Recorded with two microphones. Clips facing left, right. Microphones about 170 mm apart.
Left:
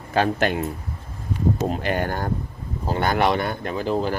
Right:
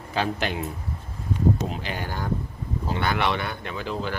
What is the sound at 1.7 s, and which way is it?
Speech, 55° left (ahead or behind).